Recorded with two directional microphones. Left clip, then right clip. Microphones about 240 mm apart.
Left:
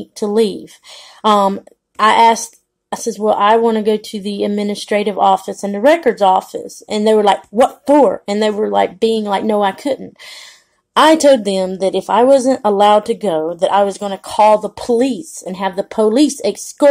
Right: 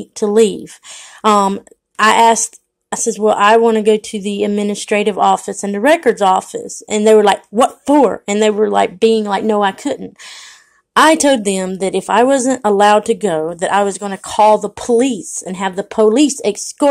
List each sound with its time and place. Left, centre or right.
0.1 s speech: right